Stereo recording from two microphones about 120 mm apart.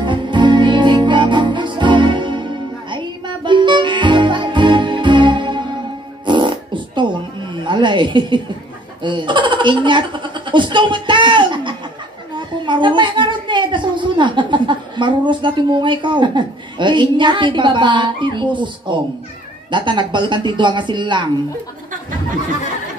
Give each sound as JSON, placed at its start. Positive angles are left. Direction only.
{"t": 0.0, "sound": "music", "side_deg": -40}
{"t": 6.2, "sound": "fart", "side_deg": -40}
{"t": 7.5, "sound": "a sound", "side_deg": -40}
{"t": 9.0, "sound": "a child's voice", "side_deg": -40}